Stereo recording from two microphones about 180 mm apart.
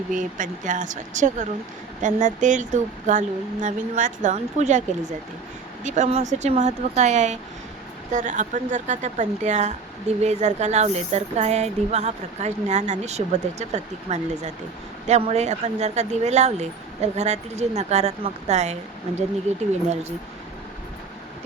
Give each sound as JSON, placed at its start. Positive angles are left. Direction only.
{"t": 0.1, "sound": "speech", "side_deg": -45}
{"t": 5.8, "sound": "speech", "side_deg": -40}